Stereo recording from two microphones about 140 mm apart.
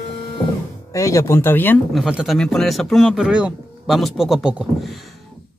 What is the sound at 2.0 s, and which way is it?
Speech, centre (ahead or behind).